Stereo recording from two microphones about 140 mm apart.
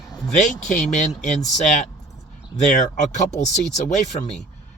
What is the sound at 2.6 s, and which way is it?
Speech, 55° left (ahead or behind).